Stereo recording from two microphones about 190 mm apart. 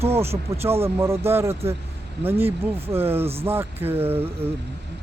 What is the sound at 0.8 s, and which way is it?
Speech, 15° right (ahead or behind).